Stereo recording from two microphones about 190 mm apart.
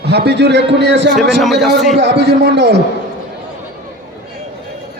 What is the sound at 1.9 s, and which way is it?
Speech, 60° right (ahead or behind).